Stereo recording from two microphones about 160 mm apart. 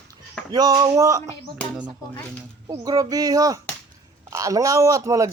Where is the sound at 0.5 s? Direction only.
25° right (ahead or behind).